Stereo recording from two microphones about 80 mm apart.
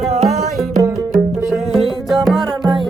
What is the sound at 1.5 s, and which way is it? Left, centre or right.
Music, centre.